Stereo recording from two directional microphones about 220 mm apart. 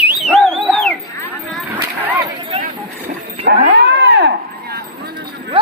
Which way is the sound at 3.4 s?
50° right (ahead or behind).